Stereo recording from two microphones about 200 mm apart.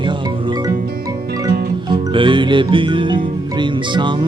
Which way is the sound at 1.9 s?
25° right (ahead or behind).